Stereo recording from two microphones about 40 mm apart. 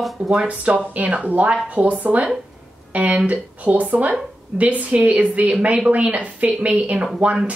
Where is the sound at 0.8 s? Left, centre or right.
Right.